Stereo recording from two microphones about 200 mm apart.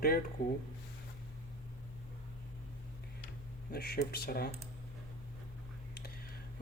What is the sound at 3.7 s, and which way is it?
Speech, 50° left (ahead or behind).